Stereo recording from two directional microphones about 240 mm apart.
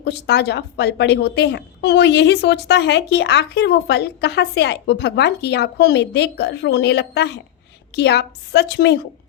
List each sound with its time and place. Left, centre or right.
0.0 s a woman's voice: left